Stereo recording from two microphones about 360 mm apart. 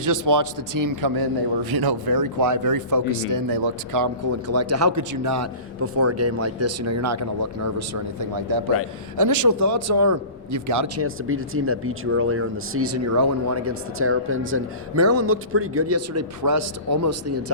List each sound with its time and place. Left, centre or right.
0.0 s a man's voice: right